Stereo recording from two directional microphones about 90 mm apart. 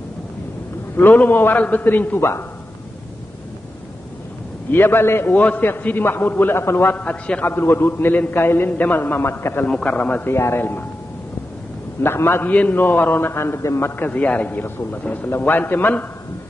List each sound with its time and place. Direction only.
0.9 s a man's voice: 20° left (ahead or behind)
4.6 s a man's voice: 25° left (ahead or behind)
9.7 s a man's voice: 10° left (ahead or behind)
10.3 s a man's voice: 30° left (ahead or behind)
12.0 s a man's voice: 25° left (ahead or behind)